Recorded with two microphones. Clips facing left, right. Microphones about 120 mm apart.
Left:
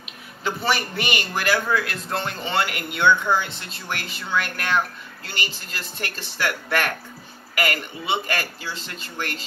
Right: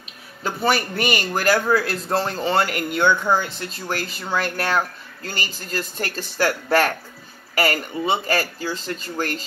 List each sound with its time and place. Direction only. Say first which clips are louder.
0.4 s a man's voice: right 3 dB; 45° right (ahead or behind)